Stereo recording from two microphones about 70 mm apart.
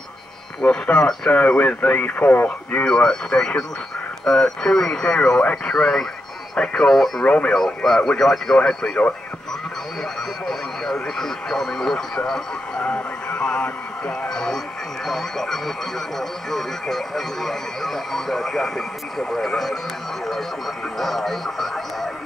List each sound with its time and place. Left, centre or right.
0.8 s speech: centre
7.2 s speech: centre
7.5 s speech: centre
10.4 s radio: centre
16.2 s speech: centre